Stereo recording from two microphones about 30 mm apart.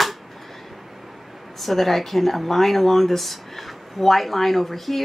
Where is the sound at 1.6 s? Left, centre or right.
Centre.